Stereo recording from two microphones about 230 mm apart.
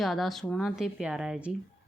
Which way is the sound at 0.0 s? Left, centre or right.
Centre.